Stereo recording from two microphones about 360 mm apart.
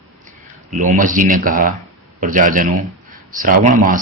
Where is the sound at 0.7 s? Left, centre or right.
Right.